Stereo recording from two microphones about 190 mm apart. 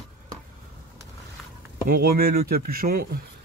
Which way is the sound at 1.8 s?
50° right (ahead or behind).